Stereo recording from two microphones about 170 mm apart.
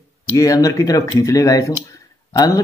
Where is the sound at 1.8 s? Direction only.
20° left (ahead or behind).